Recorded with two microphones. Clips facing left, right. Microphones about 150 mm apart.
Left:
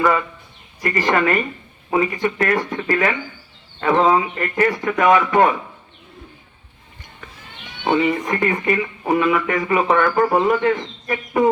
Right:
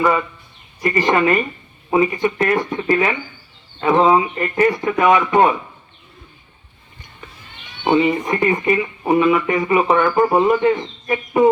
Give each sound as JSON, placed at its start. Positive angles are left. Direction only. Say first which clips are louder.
{"t": 0.0, "sound": "speech", "louder": "right 1 dB", "side_deg": -20}
{"t": 7.9, "sound": "speech", "louder": "right 2 dB", "side_deg": -20}